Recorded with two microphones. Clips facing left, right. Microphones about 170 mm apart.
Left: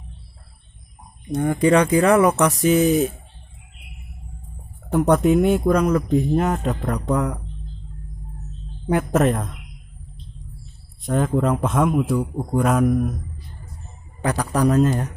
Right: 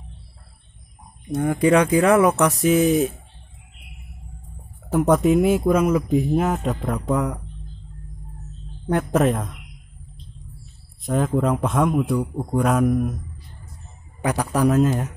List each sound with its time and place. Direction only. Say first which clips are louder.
1.3 s speech: even; 5° right (ahead or behind)
4.8 s speech: even; centre (ahead or behind)
8.8 s speech: left 1 dB; 5° left (ahead or behind)
11.0 s speech: left 1 dB; centre (ahead or behind)
14.2 s speech: even; 10° right (ahead or behind)